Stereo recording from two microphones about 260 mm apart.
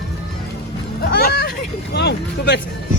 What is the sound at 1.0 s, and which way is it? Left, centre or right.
Speech, left.